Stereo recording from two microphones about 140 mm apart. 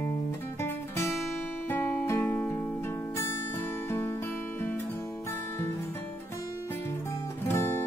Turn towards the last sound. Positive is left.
turn(degrees=20)  # may be behind; listen again after turning